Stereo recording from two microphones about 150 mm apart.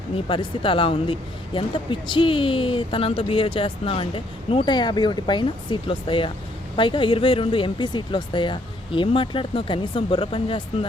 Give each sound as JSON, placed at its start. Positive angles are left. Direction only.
{"t": 0.3, "sound": "speech", "side_deg": 35}